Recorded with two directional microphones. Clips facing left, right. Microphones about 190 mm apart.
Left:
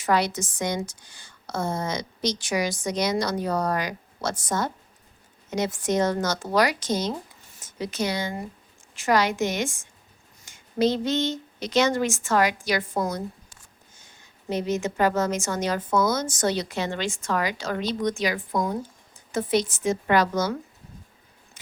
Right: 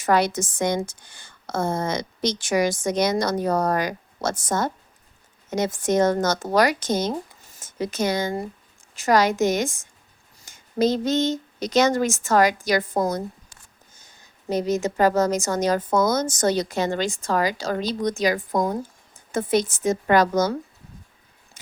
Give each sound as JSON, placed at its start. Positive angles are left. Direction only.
{"t": 0.0, "sound": "a woman's voice", "side_deg": -50}